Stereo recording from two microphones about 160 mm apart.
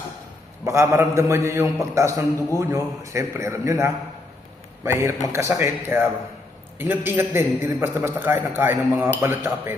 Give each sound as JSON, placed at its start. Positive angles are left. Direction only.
{"t": 0.6, "sound": "a man's voice", "side_deg": -15}